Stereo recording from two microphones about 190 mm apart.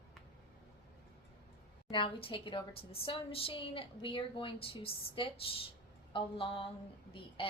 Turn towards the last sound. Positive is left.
turn(degrees=25)  # may be behind; listen again after turning